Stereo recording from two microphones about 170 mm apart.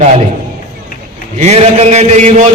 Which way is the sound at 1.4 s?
40° right (ahead or behind).